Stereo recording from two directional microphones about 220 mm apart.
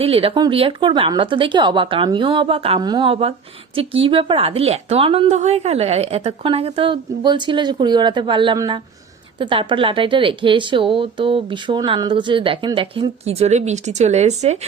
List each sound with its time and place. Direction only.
0.0 s a woman's voice: 25° right (ahead or behind)